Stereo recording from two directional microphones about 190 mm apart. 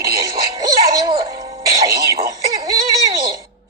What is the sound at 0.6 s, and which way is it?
Music, 20° right (ahead or behind).